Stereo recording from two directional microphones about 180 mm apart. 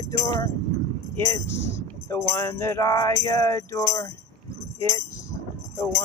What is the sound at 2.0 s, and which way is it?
Music, 15° left (ahead or behind).